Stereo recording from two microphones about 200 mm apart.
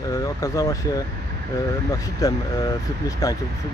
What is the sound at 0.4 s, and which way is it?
Speech, 15° left (ahead or behind).